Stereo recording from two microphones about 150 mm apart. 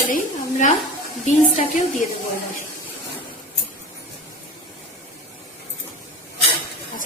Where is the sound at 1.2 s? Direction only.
55° left (ahead or behind).